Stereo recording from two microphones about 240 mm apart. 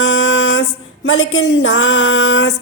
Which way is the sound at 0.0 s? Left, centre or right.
Left.